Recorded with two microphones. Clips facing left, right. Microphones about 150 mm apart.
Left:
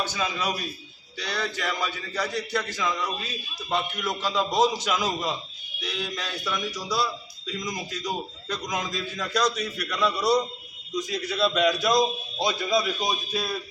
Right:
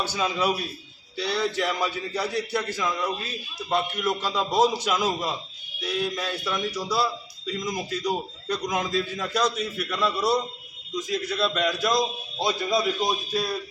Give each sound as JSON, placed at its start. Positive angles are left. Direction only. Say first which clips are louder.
{"t": 0.1, "sound": "a man's voice", "louder": "right 4 dB", "side_deg": -10}